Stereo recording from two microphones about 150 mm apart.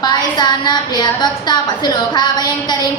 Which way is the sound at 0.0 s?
30° left (ahead or behind).